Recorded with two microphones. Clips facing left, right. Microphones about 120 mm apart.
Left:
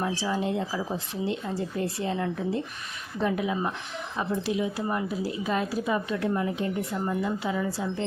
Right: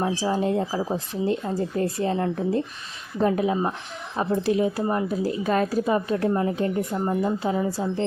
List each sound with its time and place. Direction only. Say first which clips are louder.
0.0 s speech: right 4 dB; 40° right (ahead or behind)